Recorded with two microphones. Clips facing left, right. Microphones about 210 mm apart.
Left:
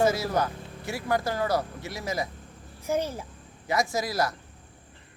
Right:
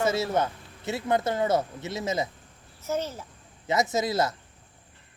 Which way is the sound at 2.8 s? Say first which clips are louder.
Left 2 dB; 10° left (ahead or behind).